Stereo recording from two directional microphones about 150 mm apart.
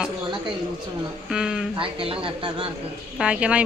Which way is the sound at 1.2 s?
5° right (ahead or behind).